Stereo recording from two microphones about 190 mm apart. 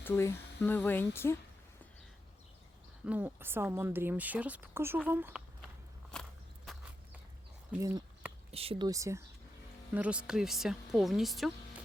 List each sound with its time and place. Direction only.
0.0 s speech: 15° left (ahead or behind)
3.1 s speech: 10° right (ahead or behind)
6.1 s walk: 5° left (ahead or behind)
7.8 s a sound: 15° right (ahead or behind)
8.5 s speech: 30° right (ahead or behind)
8.9 s speech: 15° right (ahead or behind); by 11.5 s centre (ahead or behind)